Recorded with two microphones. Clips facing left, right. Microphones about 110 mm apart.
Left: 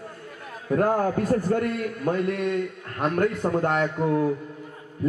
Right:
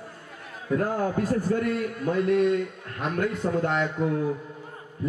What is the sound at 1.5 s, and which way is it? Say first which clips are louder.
A man's voice: left 1 dB; 50° left (ahead or behind).